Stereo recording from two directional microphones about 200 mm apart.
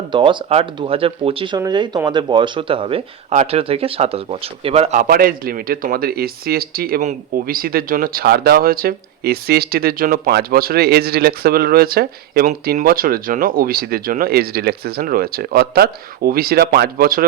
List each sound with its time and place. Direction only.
0.1 s speech: 25° right (ahead or behind); by 17.2 s 45° right (ahead or behind)